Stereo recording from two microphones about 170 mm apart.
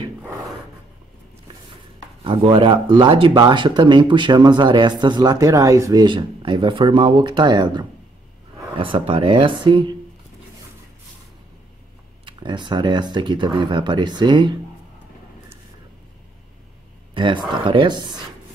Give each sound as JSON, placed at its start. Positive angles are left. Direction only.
{"t": 2.2, "sound": "speech", "side_deg": -35}
{"t": 12.3, "sound": "speech", "side_deg": -25}
{"t": 17.1, "sound": "speech", "side_deg": -30}